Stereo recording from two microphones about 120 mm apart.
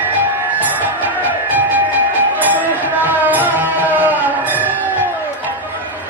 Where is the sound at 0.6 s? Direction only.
15° right (ahead or behind).